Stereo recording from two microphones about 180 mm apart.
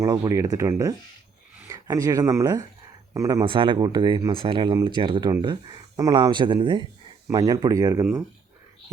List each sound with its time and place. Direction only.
0.0 s speech: 20° right (ahead or behind)